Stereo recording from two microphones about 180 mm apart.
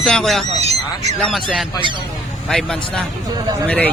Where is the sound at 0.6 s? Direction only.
35° right (ahead or behind).